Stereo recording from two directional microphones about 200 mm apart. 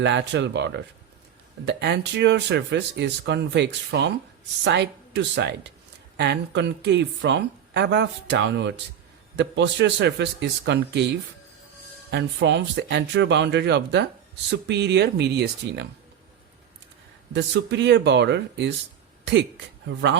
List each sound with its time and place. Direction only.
0.0 s a woman's voice: 60° right (ahead or behind)
17.3 s a woman's voice: 60° right (ahead or behind)